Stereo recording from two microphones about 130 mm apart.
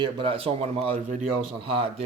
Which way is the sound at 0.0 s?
45° right (ahead or behind).